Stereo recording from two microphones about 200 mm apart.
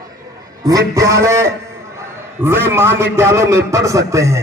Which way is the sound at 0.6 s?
15° right (ahead or behind).